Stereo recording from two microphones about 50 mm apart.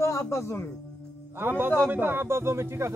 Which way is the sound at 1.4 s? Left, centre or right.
Right.